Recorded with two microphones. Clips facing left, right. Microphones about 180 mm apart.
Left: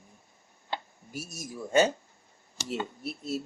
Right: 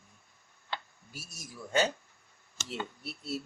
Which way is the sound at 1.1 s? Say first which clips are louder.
Left 9 dB; 40° left (ahead or behind).